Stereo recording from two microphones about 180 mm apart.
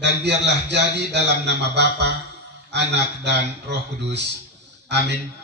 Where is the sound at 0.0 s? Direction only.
70° right (ahead or behind).